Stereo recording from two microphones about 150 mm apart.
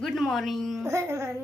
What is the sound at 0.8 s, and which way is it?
Speech, 20° right (ahead or behind).